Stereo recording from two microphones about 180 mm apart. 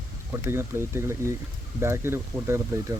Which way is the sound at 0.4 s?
15° right (ahead or behind).